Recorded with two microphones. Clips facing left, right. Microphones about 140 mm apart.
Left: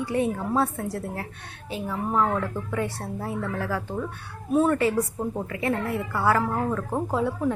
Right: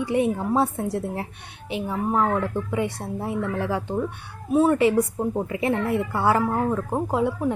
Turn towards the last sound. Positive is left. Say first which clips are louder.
# right 2 dB
turn(degrees=-15)  # may be behind; listen again after turning